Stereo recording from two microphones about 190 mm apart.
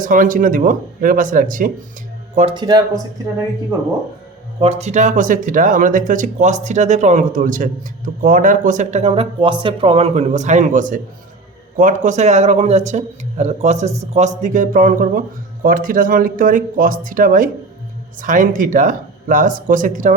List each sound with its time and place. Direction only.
0.0 s speech: 45° right (ahead or behind)
2.3 s speech: 30° right (ahead or behind)
4.6 s speech: 35° right (ahead or behind)